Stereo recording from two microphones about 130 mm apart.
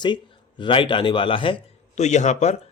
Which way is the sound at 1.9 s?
65° left (ahead or behind).